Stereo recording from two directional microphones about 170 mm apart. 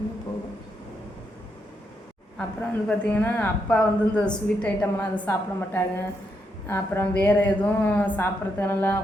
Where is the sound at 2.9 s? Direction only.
10° left (ahead or behind).